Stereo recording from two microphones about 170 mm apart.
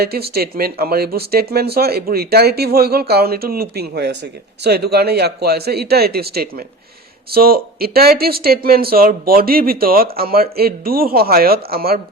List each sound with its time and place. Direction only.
0.0 s speech: 65° right (ahead or behind)